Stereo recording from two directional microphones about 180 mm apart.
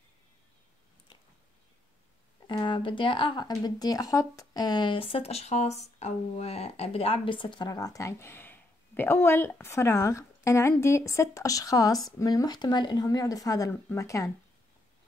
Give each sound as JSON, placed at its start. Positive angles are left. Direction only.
{"t": 2.4, "sound": "speech", "side_deg": 25}